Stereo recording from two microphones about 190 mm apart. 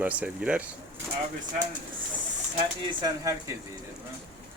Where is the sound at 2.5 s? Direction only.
20° right (ahead or behind).